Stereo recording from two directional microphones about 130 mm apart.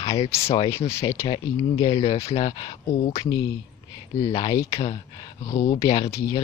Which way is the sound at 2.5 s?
35° left (ahead or behind).